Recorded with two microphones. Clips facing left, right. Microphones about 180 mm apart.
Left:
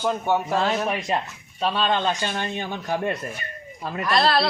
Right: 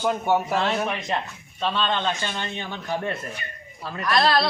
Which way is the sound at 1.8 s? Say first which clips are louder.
Left 3 dB; 40° left (ahead or behind).